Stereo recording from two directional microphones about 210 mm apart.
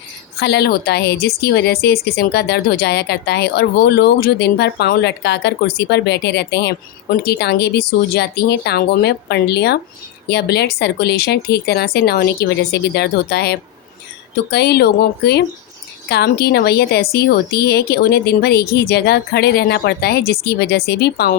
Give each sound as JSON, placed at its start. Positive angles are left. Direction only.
{"t": 0.3, "sound": "a woman's voice", "side_deg": 50}